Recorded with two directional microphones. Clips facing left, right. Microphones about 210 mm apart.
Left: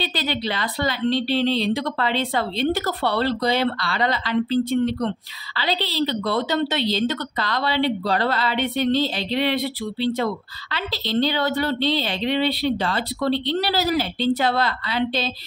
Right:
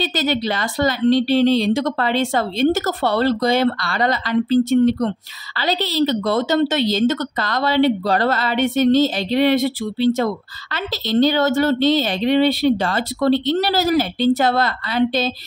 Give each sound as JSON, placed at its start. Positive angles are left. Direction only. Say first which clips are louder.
{"t": 0.0, "sound": "a woman's voice", "louder": "right 5 dB", "side_deg": -45}